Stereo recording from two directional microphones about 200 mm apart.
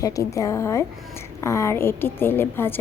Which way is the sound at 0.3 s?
15° left (ahead or behind).